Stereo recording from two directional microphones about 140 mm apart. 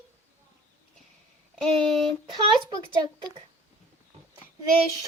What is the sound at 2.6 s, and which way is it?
Speech, 30° right (ahead or behind).